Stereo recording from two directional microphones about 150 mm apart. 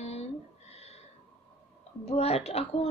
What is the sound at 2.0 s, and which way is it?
Speech, 45° left (ahead or behind).